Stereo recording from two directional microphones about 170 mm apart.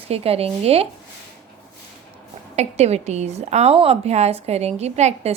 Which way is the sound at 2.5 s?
40° right (ahead or behind).